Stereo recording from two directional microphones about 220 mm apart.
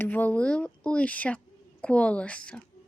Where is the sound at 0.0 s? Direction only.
10° left (ahead or behind).